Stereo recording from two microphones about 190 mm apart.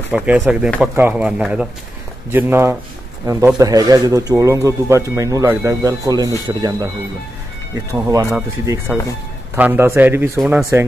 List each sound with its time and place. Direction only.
0.1 s speech: 5° right (ahead or behind)
8.1 s speech: 15° right (ahead or behind)